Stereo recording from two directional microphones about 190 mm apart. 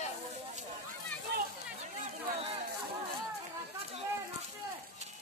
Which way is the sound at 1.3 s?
55° right (ahead or behind).